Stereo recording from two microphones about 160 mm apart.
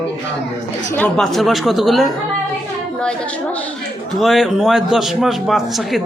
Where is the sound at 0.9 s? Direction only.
10° left (ahead or behind).